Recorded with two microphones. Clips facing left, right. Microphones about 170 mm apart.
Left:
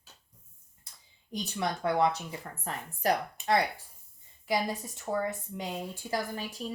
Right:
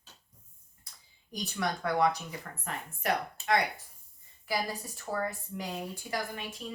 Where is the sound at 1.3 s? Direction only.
25° left (ahead or behind).